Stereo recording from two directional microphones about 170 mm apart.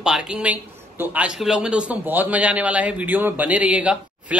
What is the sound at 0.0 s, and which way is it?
A man's voice, 5° right (ahead or behind).